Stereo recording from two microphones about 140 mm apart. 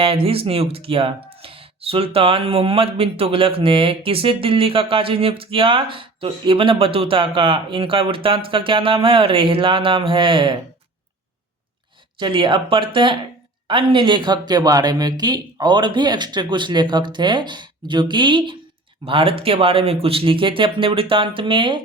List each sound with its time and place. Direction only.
0.0 s speech: 40° right (ahead or behind)
12.2 s speech: 35° right (ahead or behind)